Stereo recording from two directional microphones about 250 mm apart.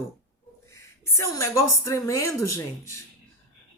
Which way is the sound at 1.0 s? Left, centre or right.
Centre.